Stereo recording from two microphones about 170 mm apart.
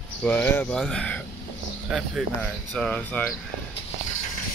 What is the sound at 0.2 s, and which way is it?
Speech, 10° left (ahead or behind).